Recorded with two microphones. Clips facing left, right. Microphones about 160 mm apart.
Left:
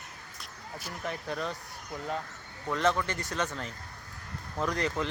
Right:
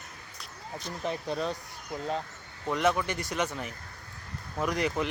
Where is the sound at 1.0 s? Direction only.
20° right (ahead or behind).